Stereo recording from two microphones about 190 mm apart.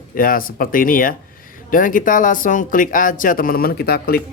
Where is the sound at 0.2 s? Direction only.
50° left (ahead or behind).